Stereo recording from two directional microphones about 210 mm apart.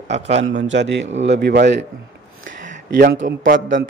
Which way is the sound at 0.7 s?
60° right (ahead or behind).